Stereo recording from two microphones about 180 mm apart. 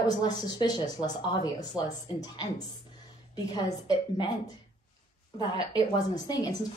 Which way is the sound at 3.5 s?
20° left (ahead or behind).